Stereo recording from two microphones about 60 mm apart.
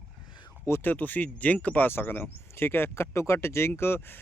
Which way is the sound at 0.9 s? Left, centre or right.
Left.